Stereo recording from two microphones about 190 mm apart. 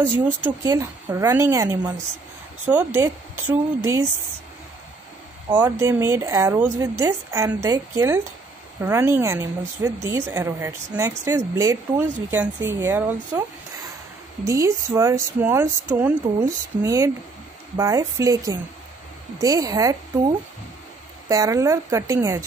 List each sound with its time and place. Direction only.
0.2 s a woman's voice: 10° right (ahead or behind)
5.5 s a woman's voice: 10° right (ahead or behind)